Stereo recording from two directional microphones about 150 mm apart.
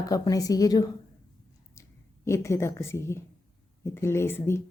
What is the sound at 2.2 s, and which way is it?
A woman's voice, 20° left (ahead or behind).